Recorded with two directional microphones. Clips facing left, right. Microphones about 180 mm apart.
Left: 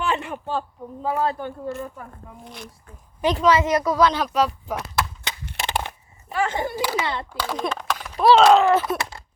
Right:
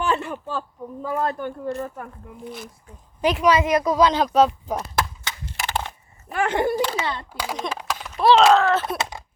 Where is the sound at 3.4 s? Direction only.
15° right (ahead or behind).